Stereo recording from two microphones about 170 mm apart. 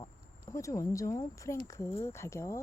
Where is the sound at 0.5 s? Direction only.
15° left (ahead or behind).